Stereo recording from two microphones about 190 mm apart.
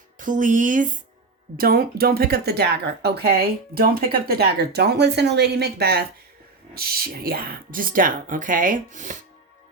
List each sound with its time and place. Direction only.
0.2 s speech: 45° right (ahead or behind)